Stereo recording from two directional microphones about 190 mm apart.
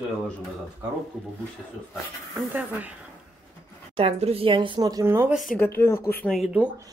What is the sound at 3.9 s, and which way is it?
Speech, 30° right (ahead or behind).